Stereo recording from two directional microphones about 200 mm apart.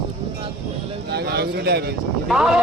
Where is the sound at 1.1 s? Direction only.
55° right (ahead or behind).